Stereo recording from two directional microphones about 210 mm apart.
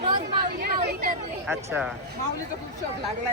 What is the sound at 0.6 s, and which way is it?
Vehicle, 45° right (ahead or behind).